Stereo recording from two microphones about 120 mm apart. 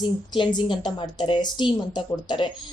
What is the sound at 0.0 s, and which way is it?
Speech, 40° left (ahead or behind).